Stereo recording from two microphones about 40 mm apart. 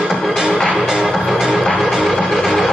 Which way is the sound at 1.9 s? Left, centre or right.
Centre.